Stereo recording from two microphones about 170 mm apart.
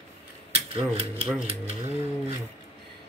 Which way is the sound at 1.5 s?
35° right (ahead or behind).